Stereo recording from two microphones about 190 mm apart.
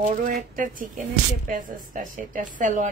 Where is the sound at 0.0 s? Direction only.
45° right (ahead or behind).